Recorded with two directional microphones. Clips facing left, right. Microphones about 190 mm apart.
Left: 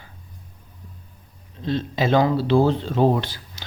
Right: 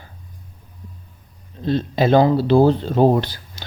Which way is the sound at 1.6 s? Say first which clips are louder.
Right 4 dB; 40° right (ahead or behind).